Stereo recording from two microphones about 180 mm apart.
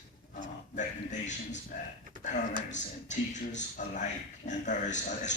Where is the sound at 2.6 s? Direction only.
40° left (ahead or behind).